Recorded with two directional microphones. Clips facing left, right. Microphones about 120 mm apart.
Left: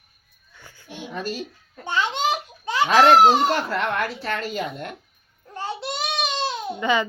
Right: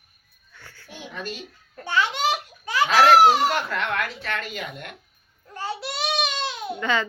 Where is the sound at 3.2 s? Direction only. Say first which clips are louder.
Left 1 dB; 30° left (ahead or behind).